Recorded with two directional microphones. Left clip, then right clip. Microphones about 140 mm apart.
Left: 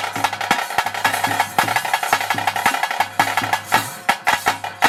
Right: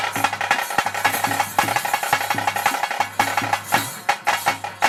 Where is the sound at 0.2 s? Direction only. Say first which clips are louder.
Left 2 dB; 20° left (ahead or behind).